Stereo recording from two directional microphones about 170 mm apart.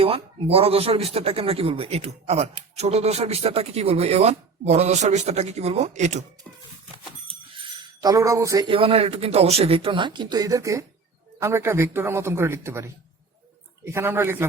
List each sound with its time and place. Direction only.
0.0 s speech: 35° right (ahead or behind)
7.5 s speech: 25° right (ahead or behind)